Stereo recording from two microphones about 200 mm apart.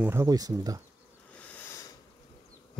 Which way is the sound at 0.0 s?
15° right (ahead or behind).